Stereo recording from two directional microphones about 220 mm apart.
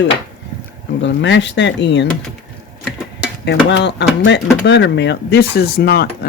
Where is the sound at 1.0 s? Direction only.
55° left (ahead or behind).